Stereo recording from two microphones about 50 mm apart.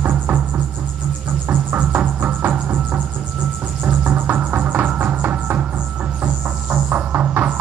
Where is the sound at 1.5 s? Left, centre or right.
Right.